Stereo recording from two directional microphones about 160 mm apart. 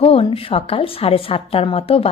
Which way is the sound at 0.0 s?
35° left (ahead or behind).